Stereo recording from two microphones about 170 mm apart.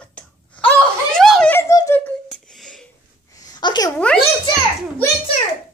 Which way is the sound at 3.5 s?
25° left (ahead or behind).